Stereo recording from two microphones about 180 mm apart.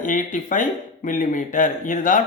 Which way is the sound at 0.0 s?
45° left (ahead or behind).